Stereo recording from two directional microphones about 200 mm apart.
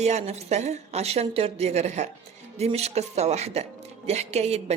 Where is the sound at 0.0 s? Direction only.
35° right (ahead or behind).